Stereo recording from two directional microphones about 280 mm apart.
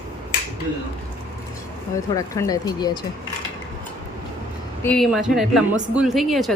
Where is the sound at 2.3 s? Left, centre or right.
Centre.